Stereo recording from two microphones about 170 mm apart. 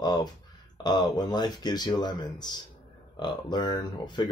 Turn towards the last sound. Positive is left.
turn(degrees=25)  # may be behind; listen again after turning